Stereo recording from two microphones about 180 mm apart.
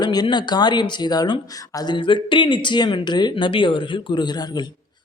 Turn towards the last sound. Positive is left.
turn(degrees=25)  # may be behind; listen again after turning